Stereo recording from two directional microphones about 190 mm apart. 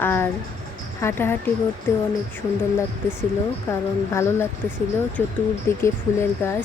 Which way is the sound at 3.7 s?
15° left (ahead or behind).